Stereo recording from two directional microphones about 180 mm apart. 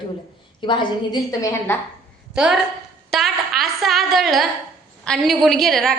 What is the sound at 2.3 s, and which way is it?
Speech, 5° right (ahead or behind).